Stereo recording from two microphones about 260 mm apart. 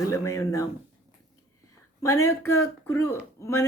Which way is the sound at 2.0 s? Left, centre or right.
Centre.